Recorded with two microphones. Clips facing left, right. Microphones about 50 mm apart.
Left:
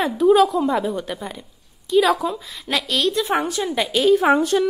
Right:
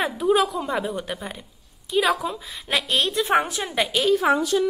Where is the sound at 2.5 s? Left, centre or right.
Centre.